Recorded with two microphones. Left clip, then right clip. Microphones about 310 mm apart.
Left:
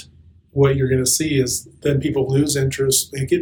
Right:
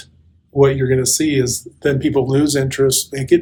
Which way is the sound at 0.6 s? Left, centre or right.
Right.